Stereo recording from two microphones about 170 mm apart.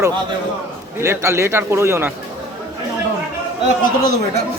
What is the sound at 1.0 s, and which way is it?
Speech, 15° right (ahead or behind).